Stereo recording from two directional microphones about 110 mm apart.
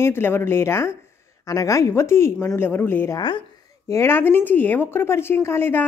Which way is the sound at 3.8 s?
25° left (ahead or behind).